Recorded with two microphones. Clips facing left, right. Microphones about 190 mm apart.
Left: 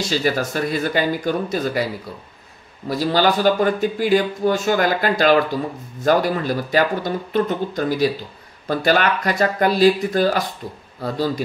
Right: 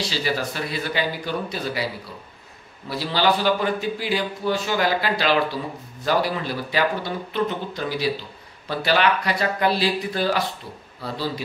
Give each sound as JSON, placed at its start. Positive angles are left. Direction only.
{"t": 0.0, "sound": "speech", "side_deg": 45}
{"t": 2.9, "sound": "speech", "side_deg": 45}